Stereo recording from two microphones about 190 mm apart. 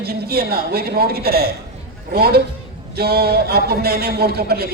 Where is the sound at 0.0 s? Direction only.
55° right (ahead or behind).